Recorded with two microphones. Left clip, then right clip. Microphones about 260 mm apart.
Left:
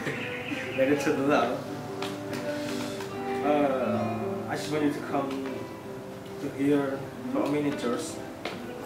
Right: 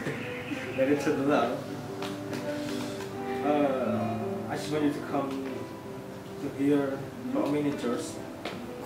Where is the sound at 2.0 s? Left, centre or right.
Centre.